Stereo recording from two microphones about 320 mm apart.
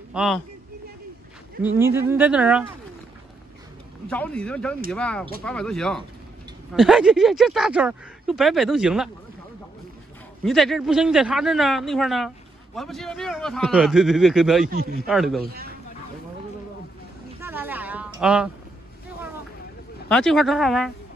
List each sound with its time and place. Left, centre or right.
0.1 s speech: centre
1.6 s speech: centre
4.1 s speech: centre
10.4 s speech: centre
14.7 s a man's voice: right
15.0 s speech: centre
15.4 s a man's voice: right
17.4 s a sound: centre
20.1 s speech: centre